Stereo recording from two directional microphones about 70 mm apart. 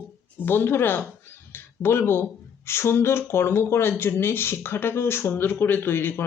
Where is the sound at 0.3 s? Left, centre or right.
Left.